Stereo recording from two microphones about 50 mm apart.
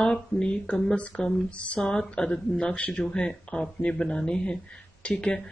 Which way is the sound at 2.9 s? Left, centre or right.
Centre.